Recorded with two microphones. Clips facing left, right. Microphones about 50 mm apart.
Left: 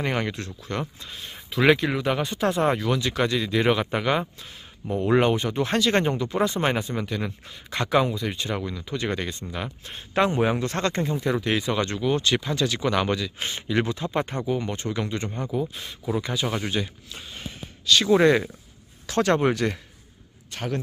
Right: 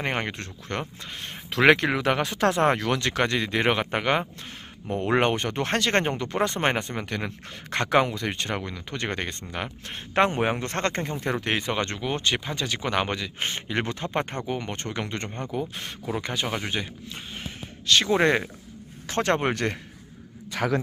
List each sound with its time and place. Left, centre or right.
0.0 s speech: right
1.5 s speech: right
16.4 s a man's voice: right